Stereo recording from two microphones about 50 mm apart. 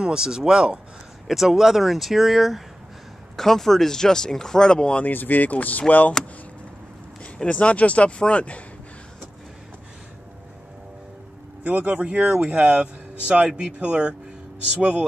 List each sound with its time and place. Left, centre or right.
0.0 s speech: centre
3.3 s speech: centre
5.0 s speech: left
7.4 s speech: left
11.6 s speech: right